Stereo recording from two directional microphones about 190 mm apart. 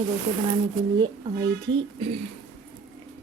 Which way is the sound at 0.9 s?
25° right (ahead or behind).